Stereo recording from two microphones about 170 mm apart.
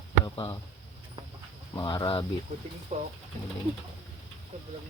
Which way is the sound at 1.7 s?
25° left (ahead or behind).